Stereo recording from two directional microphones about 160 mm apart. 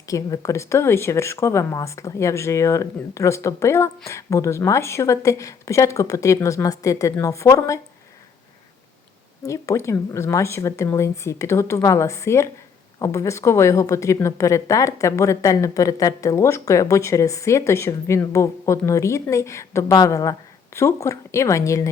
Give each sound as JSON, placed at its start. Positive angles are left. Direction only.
{"t": 0.0, "sound": "speech", "side_deg": 20}
{"t": 9.4, "sound": "speech", "side_deg": 20}